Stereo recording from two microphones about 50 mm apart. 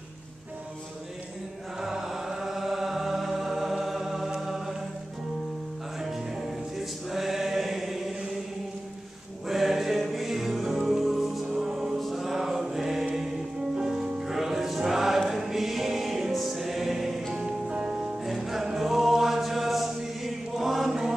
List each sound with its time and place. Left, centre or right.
1.8 s chant: centre
5.9 s music: centre
9.5 s music: centre
17.3 s music: centre
18.2 s music: centre